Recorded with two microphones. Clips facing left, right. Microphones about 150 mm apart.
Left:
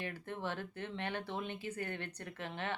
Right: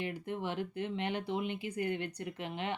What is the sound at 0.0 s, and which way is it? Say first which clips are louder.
Speech: right 4 dB; 15° right (ahead or behind).